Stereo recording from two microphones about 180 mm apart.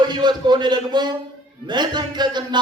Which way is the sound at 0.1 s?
25° right (ahead or behind).